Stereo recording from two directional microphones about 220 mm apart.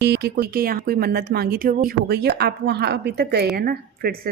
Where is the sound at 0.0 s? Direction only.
50° right (ahead or behind).